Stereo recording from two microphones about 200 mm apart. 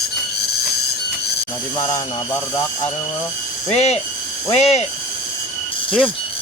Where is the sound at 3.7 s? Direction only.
30° left (ahead or behind).